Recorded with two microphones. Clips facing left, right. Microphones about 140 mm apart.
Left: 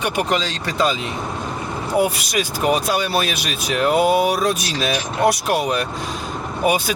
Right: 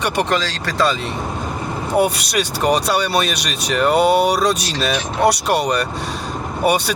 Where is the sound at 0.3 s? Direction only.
20° left (ahead or behind).